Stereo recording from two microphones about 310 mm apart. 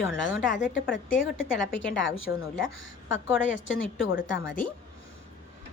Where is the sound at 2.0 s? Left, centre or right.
Left.